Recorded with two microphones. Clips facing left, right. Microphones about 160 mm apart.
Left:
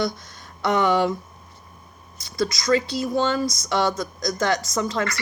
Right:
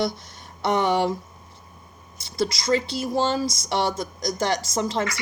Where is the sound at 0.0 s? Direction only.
30° right (ahead or behind).